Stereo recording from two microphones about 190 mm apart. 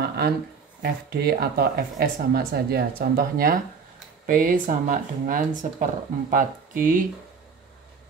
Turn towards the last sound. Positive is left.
turn(degrees=-45)  # may be behind; listen again after turning